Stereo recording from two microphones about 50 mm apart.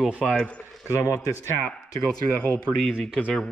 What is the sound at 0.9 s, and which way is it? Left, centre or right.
Speech, left.